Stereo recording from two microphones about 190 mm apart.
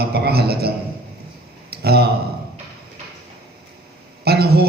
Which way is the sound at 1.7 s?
55° right (ahead or behind).